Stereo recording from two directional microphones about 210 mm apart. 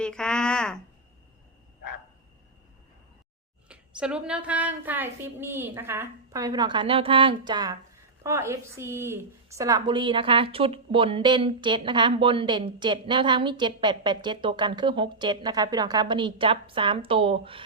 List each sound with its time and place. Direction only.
0.0 s speech: 5° left (ahead or behind)
3.7 s a woman's voice: 5° right (ahead or behind); by 17.6 s 25° right (ahead or behind)